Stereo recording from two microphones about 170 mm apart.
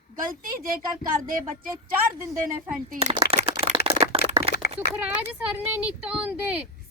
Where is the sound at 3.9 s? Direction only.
35° right (ahead or behind).